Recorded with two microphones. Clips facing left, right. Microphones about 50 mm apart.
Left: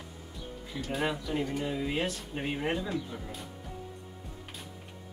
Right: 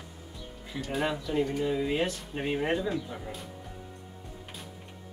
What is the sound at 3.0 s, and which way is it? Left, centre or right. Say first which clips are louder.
Speech: right 2 dB; centre.